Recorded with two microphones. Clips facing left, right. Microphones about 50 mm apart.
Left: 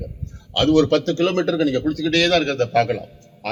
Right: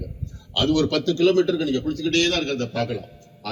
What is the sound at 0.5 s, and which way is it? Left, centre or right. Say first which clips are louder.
A man's voice: left 5 dB; left.